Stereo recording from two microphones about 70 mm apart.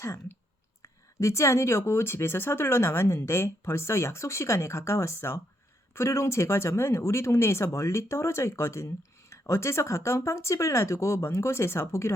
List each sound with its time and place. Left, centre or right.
0.0 s speech: left